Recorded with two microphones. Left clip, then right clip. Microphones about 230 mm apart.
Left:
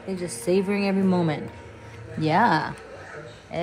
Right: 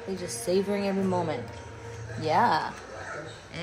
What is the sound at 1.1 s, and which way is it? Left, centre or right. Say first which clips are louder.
Speech: left 3 dB; left.